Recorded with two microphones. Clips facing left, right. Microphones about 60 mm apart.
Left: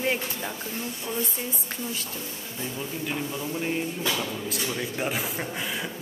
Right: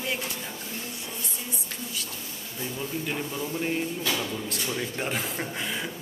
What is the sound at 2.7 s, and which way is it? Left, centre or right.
Speech, centre.